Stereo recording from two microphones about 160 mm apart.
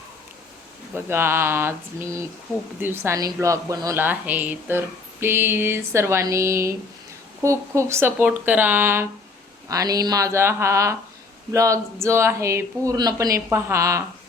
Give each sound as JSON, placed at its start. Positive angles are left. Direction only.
{"t": 0.9, "sound": "a woman's voice", "side_deg": -15}